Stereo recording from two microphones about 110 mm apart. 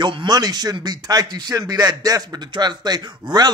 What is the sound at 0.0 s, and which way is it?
Speech, 45° right (ahead or behind).